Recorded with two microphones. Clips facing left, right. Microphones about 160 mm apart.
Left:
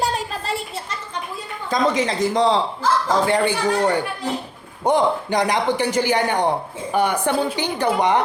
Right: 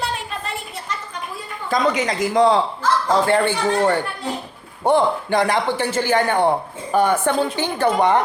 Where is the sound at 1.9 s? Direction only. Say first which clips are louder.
Even; 30° left (ahead or behind).